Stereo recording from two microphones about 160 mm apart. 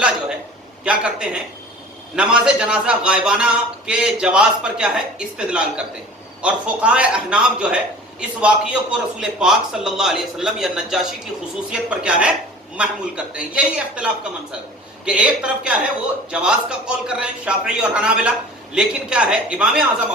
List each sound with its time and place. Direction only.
0.9 s a man's voice: 5° right (ahead or behind)